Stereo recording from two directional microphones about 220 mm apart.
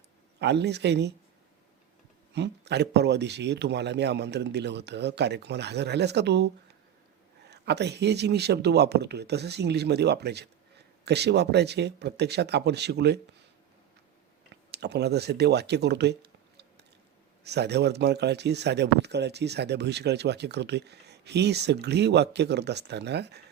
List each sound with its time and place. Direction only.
0.3 s a man's voice: 50° right (ahead or behind)
2.3 s a man's voice: 50° right (ahead or behind)
14.5 s a man's voice: 50° right (ahead or behind)